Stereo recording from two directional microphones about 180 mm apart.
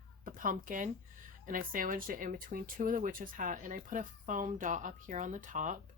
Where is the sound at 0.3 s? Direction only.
50° right (ahead or behind).